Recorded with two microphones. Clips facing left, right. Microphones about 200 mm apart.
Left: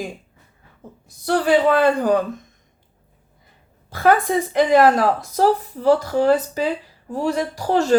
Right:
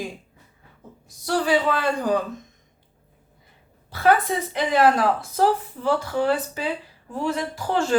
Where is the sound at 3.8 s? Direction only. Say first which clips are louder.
Left 3 dB; 45° left (ahead or behind).